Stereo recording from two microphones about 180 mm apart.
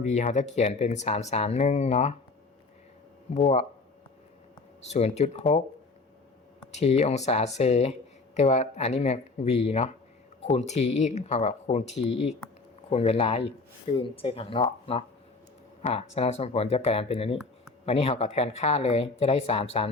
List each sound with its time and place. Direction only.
0.0 s speech: 40° left (ahead or behind)
3.3 s speech: 35° left (ahead or behind)
4.9 s speech: 35° left (ahead or behind)
6.7 s speech: 35° left (ahead or behind)